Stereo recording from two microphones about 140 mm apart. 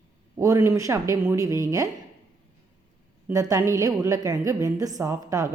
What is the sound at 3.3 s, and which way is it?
A woman's voice, 25° right (ahead or behind).